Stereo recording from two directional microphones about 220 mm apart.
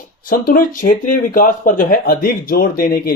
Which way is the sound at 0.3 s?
40° left (ahead or behind).